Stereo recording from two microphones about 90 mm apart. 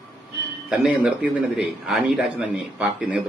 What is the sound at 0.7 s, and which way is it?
A man's voice, 10° right (ahead or behind).